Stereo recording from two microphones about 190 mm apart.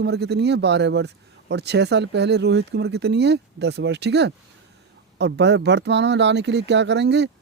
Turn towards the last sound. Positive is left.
turn(degrees=-65)  # may be behind; listen again after turning